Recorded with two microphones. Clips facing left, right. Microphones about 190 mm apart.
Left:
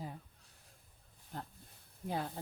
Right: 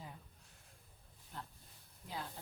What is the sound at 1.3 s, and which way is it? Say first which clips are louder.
Speech: left 5 dB; 45° left (ahead or behind).